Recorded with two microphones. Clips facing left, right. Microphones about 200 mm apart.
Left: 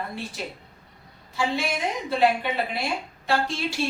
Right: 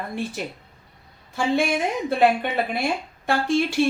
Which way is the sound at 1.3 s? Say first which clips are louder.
Right 5 dB; 50° right (ahead or behind).